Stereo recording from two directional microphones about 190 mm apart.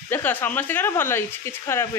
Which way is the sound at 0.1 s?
10° left (ahead or behind).